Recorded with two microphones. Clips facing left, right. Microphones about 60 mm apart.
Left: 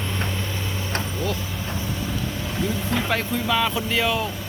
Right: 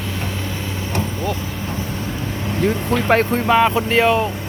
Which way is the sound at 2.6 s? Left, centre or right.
Right.